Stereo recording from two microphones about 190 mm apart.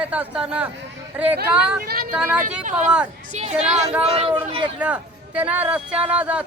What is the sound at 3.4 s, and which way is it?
A woman's voice, 35° right (ahead or behind).